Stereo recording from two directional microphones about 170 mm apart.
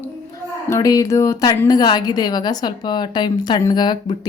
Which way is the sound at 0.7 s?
20° left (ahead or behind).